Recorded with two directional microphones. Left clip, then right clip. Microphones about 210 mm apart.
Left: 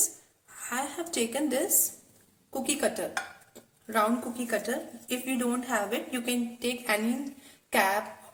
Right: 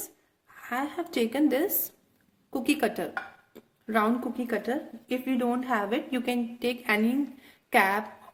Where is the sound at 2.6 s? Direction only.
45° right (ahead or behind).